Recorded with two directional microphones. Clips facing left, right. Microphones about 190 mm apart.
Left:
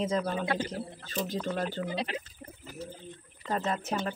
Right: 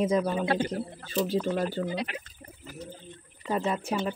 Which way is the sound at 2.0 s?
25° left (ahead or behind).